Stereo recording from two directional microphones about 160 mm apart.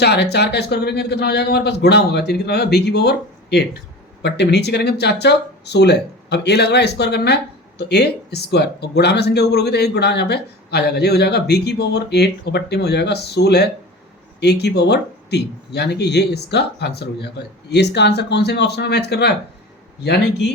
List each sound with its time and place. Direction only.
0.0 s speech: 90° left